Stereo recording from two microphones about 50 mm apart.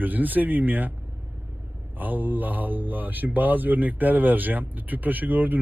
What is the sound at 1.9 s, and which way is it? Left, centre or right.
A man's voice, right.